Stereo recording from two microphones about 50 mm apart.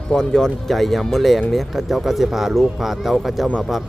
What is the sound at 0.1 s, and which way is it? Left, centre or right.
Speech, centre.